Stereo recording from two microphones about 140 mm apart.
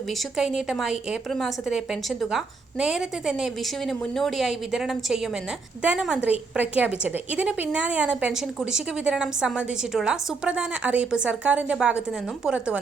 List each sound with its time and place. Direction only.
0.1 s a woman's voice: 5° right (ahead or behind)